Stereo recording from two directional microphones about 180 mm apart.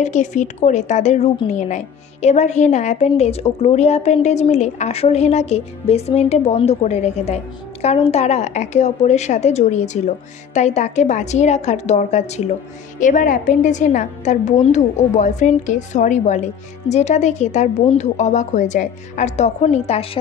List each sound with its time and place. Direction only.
0.0 s a woman's voice: 40° left (ahead or behind)